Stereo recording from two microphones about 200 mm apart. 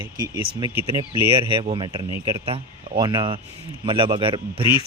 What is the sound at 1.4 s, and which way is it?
A man's voice, 25° right (ahead or behind).